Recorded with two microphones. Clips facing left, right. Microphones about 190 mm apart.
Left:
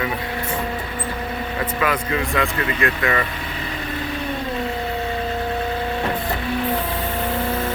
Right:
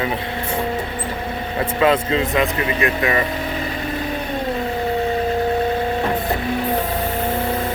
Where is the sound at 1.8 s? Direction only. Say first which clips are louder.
Right 6 dB; 25° right (ahead or behind).